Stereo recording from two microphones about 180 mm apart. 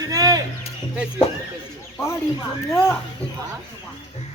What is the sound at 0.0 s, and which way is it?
Music, 20° right (ahead or behind).